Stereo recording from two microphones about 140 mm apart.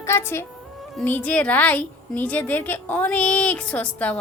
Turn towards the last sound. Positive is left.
turn(degrees=10)  # may be behind; listen again after turning